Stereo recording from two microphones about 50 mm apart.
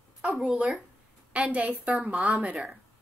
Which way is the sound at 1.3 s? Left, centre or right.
Right.